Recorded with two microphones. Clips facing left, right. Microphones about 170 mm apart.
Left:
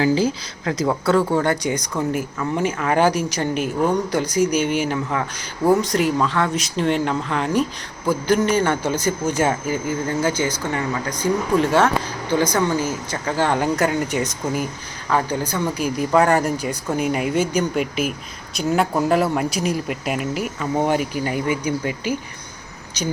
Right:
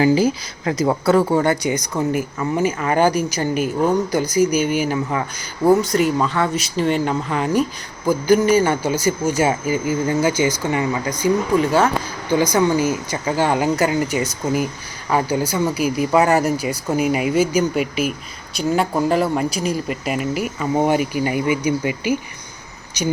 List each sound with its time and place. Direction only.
0.0 s speech: 10° right (ahead or behind)
11.2 s speech: centre (ahead or behind)